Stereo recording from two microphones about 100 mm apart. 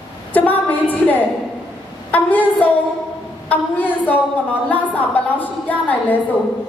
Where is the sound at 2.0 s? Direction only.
15° left (ahead or behind).